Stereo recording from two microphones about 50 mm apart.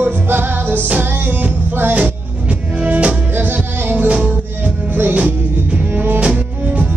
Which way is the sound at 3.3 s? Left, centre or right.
Right.